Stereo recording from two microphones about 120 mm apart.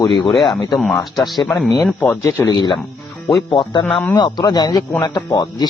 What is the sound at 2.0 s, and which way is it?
A man's voice, 25° left (ahead or behind).